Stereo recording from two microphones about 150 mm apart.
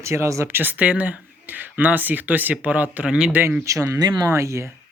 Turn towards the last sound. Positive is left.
turn(degrees=-20)  # may be behind; listen again after turning